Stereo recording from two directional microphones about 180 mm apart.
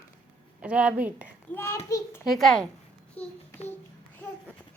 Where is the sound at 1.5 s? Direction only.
15° left (ahead or behind).